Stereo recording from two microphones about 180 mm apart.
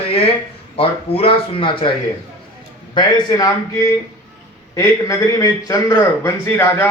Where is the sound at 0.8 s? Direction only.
30° left (ahead or behind).